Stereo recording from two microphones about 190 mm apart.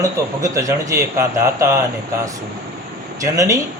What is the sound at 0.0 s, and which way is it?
A man's voice, 15° right (ahead or behind).